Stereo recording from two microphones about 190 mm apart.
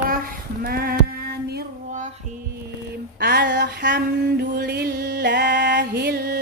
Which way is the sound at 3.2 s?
60° right (ahead or behind).